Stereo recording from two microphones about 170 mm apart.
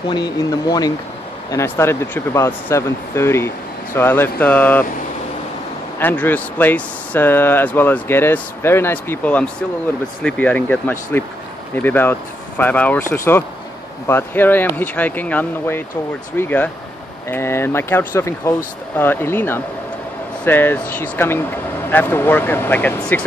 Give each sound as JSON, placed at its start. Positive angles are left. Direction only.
{"t": 0.1, "sound": "speech", "side_deg": 25}
{"t": 5.9, "sound": "speech", "side_deg": 10}